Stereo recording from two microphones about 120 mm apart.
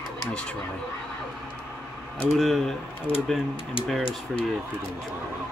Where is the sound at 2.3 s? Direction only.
Centre (ahead or behind).